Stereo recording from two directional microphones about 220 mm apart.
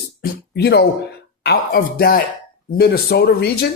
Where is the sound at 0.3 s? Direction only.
50° left (ahead or behind).